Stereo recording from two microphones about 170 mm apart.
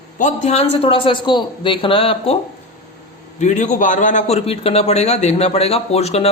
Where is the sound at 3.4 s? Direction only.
45° left (ahead or behind).